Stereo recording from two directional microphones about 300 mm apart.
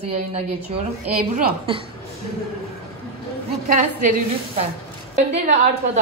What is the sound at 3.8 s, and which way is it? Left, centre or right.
A woman's voice, right.